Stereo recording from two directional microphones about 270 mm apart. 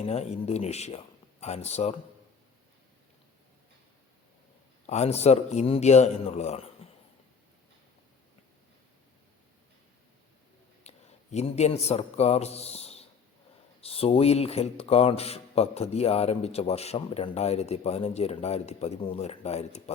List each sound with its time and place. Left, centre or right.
0.0 s speech: left
4.9 s speech: left
10.8 s a man's voice: left